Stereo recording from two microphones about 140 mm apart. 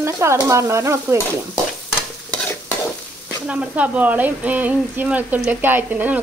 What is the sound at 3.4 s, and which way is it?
Speech, 10° right (ahead or behind).